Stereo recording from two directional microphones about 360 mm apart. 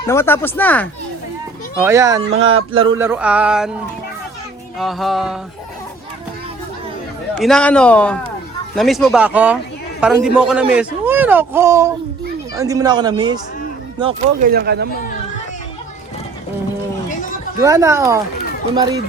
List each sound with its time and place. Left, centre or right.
0.1 s speech: centre
1.8 s a man's voice: centre
2.3 s a sound: right
3.0 s speech: centre
4.8 s speech: centre
7.3 s a man's voice: centre; by 14.8 s right
17.6 s a man's voice: centre